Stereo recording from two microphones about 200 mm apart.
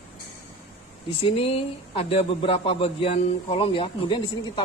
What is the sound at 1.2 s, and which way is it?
Speech, 25° left (ahead or behind).